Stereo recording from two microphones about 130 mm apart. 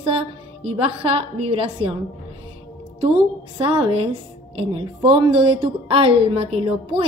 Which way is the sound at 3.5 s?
45° right (ahead or behind).